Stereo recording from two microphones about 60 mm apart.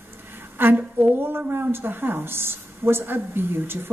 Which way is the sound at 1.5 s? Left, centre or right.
Right.